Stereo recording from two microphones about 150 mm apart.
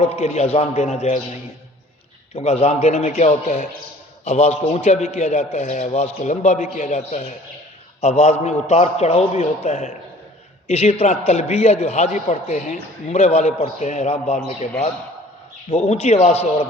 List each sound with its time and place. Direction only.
0.2 s a man's voice: 45° left (ahead or behind)
2.3 s a man's voice: 45° left (ahead or behind)
6.6 s a man's voice: 60° left (ahead or behind)
15.7 s a man's voice: 45° left (ahead or behind)